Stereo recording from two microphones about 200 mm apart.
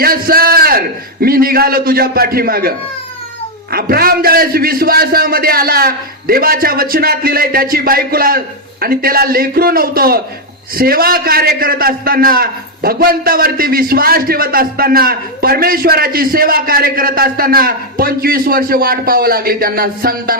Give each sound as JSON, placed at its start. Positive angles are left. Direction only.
{"t": 0.0, "sound": "a man's voice", "side_deg": -45}